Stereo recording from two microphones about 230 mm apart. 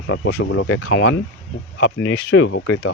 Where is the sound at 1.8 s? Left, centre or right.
Left.